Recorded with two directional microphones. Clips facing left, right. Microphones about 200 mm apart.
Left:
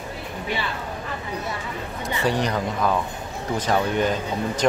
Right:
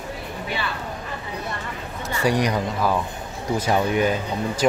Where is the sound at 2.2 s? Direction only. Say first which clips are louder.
Right 2 dB; 10° right (ahead or behind).